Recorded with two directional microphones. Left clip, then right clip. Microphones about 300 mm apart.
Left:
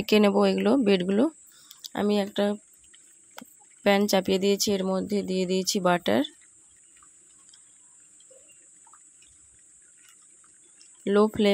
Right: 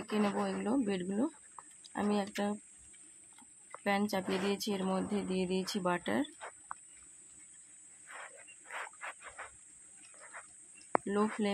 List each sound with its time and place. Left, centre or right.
0.0 s speech: left
3.8 s speech: left
11.1 s speech: left